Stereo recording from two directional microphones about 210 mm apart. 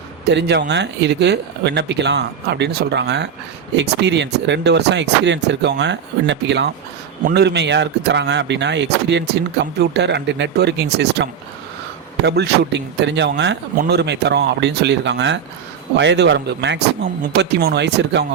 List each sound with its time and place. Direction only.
0.3 s speech: 55° right (ahead or behind)